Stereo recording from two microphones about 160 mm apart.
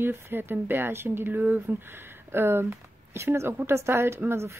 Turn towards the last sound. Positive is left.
turn(degrees=-15)  # may be behind; listen again after turning